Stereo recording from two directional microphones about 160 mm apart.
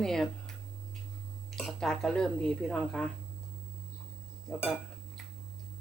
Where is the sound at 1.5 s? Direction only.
Centre (ahead or behind).